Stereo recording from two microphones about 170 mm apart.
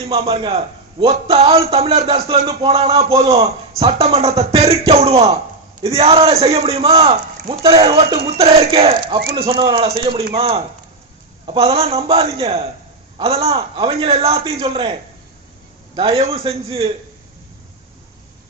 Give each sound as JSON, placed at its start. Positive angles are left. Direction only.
{"t": 0.1, "sound": "a man's voice", "side_deg": -35}
{"t": 16.0, "sound": "a man's voice", "side_deg": -35}